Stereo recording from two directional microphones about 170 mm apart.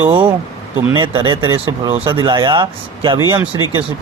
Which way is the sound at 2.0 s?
30° right (ahead or behind).